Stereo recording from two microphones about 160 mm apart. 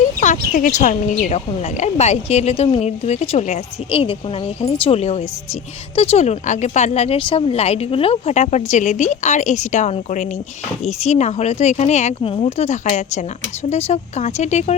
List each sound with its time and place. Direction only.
0.2 s speech: 55° left (ahead or behind)